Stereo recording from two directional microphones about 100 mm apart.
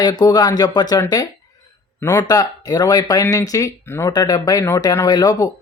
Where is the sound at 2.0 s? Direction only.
30° left (ahead or behind).